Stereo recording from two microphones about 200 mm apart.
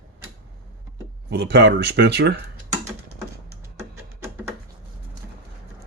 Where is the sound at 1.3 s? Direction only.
55° right (ahead or behind).